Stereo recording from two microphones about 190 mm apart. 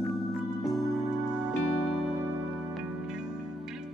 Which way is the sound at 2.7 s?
5° right (ahead or behind).